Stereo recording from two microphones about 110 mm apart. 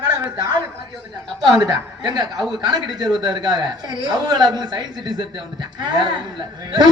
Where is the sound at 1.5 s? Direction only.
35° right (ahead or behind).